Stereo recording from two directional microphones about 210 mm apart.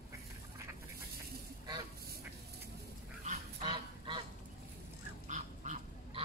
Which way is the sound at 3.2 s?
25° right (ahead or behind).